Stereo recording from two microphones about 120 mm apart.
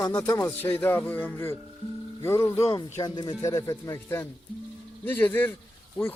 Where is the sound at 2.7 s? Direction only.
35° left (ahead or behind).